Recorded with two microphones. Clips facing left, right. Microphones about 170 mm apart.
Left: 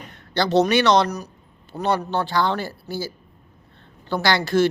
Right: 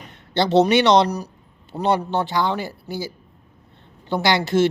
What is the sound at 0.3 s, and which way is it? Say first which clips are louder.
A man's voice: right 2 dB; 25° right (ahead or behind).